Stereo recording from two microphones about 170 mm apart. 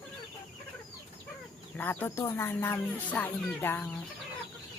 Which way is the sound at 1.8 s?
10° left (ahead or behind).